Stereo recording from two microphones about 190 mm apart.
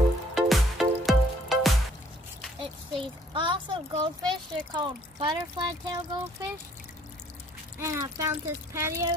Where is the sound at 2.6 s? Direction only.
25° right (ahead or behind).